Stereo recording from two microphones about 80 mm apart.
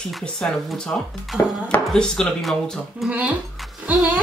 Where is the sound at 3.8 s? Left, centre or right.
Centre.